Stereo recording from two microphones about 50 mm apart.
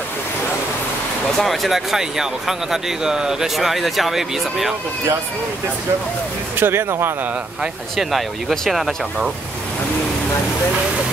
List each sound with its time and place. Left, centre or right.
1.4 s speech: centre
6.6 s speech: right
8.0 s speech: centre